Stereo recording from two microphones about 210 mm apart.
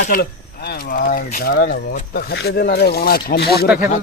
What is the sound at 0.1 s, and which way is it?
Speech, 45° left (ahead or behind).